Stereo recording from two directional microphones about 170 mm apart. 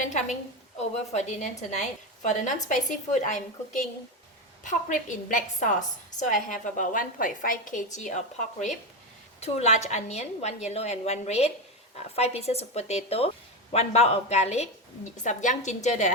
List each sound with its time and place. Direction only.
0.0 s a sound: 45° left (ahead or behind)
0.8 s a woman's voice: 40° left (ahead or behind)
4.6 s a woman's voice: 50° left (ahead or behind)